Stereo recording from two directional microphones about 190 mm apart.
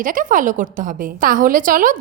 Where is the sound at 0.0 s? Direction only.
45° right (ahead or behind).